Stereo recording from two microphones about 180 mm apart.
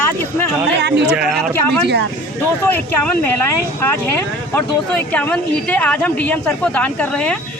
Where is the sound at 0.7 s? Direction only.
70° right (ahead or behind).